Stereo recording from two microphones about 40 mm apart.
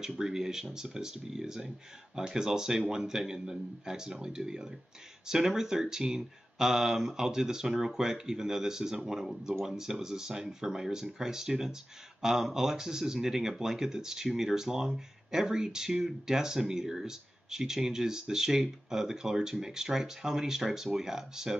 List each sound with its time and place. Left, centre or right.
0.2 s speech: centre